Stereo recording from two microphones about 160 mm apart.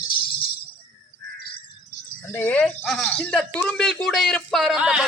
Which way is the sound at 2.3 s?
10° left (ahead or behind).